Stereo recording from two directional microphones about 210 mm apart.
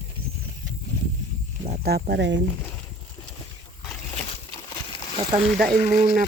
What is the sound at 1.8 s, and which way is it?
Speech, 50° right (ahead or behind).